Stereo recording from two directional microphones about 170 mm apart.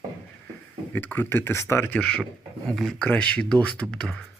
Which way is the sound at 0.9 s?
10° left (ahead or behind).